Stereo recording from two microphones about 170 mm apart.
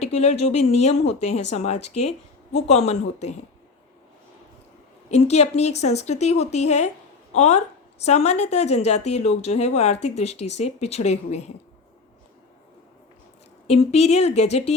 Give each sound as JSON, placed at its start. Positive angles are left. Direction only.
{"t": 0.0, "sound": "speech", "side_deg": 40}
{"t": 5.1, "sound": "speech", "side_deg": 40}
{"t": 13.7, "sound": "speech", "side_deg": 40}